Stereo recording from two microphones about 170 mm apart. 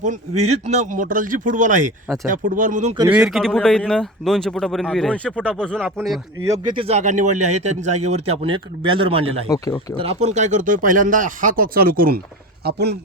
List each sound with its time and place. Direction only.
0.0 s speech: 45° right (ahead or behind)
3.1 s speech: 5° right (ahead or behind)
6.7 s a man's voice: 40° right (ahead or behind); by 12.2 s 60° right (ahead or behind)
12.6 s speech: 75° right (ahead or behind)